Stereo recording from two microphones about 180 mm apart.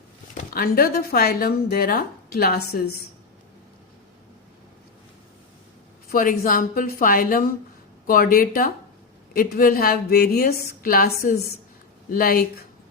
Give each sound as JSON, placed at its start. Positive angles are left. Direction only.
{"t": 0.5, "sound": "a woman's voice", "side_deg": 55}
{"t": 6.1, "sound": "a woman's voice", "side_deg": 50}